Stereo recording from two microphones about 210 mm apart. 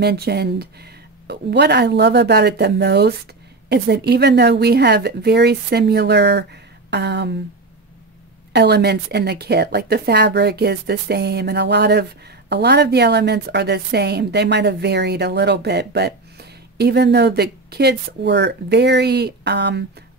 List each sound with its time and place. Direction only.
0.0 s a woman's voice: 50° right (ahead or behind)
8.5 s a woman's voice: 50° right (ahead or behind)